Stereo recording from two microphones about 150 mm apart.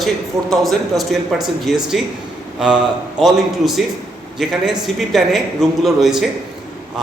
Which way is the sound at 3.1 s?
Centre (ahead or behind).